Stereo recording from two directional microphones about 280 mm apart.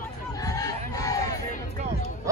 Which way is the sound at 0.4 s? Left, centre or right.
Centre.